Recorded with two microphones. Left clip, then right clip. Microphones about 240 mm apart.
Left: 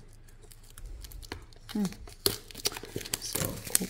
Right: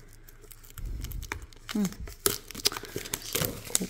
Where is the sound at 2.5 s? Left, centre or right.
Centre.